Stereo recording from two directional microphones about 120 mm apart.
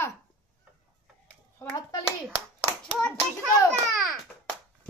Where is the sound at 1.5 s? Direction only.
30° left (ahead or behind).